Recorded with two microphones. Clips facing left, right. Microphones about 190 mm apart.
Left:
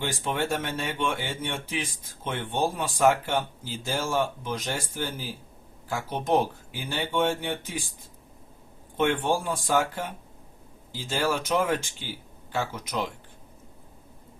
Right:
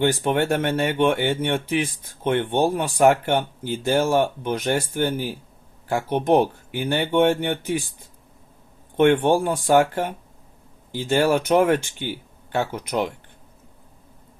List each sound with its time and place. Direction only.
0.0 s speech: 60° right (ahead or behind)
9.0 s speech: 65° right (ahead or behind)